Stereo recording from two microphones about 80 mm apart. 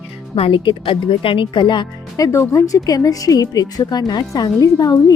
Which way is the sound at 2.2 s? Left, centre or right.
Left.